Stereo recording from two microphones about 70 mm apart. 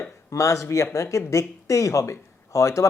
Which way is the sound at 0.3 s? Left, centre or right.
Left.